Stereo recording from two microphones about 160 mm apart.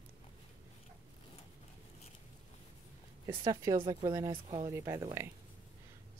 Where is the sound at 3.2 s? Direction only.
20° right (ahead or behind).